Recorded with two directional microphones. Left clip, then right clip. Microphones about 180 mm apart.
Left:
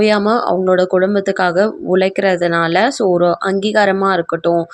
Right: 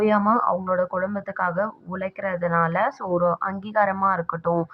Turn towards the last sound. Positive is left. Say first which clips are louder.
# left 9 dB
turn(degrees=20)  # may be behind; listen again after turning